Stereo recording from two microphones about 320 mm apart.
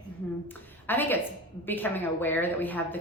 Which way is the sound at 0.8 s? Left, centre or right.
Centre.